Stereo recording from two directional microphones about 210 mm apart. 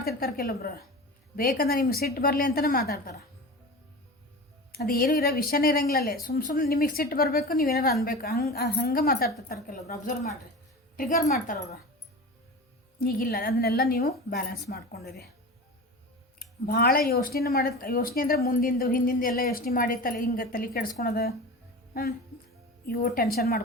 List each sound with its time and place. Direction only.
0.2 s a woman's voice: 45° left (ahead or behind)
4.7 s a woman's voice: 45° left (ahead or behind)
13.0 s a woman's voice: 45° left (ahead or behind)
16.4 s a woman's voice: 45° left (ahead or behind)
22.9 s a woman's voice: 45° left (ahead or behind)